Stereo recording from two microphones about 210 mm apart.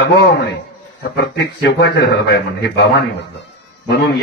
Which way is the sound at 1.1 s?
55° left (ahead or behind).